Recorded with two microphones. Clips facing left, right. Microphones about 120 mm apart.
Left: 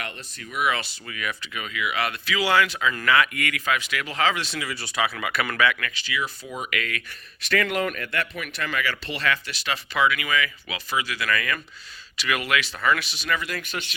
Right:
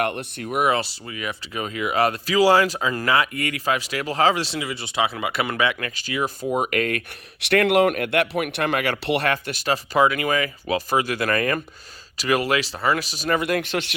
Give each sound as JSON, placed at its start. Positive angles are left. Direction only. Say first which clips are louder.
{"t": 0.0, "sound": "speech", "louder": "right 12 dB", "side_deg": -60}
{"t": 0.7, "sound": "speech", "louder": "right 5 dB", "side_deg": -35}
{"t": 1.6, "sound": "speech", "louder": "right 6 dB", "side_deg": -40}
{"t": 5.9, "sound": "speech", "louder": "right 4 dB", "side_deg": -45}
{"t": 7.4, "sound": "speech", "louder": "right 7 dB", "side_deg": -70}
{"t": 13.4, "sound": "speech", "louder": "right 9 dB", "side_deg": -65}